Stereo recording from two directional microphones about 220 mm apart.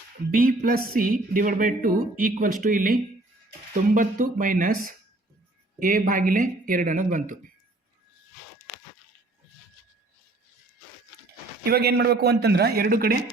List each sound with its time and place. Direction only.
0.3 s speech: 40° right (ahead or behind)
5.8 s speech: 40° right (ahead or behind)
11.6 s a man's voice: 45° right (ahead or behind)